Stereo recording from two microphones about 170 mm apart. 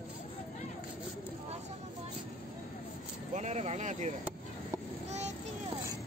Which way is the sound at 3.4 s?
40° right (ahead or behind).